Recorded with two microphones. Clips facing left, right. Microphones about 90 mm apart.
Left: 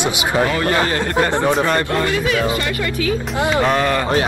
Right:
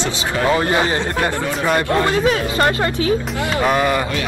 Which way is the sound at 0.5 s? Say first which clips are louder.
Right 1 dB; 20° right (ahead or behind).